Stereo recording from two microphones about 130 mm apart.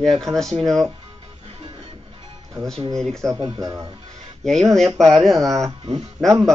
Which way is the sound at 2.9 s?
5° left (ahead or behind).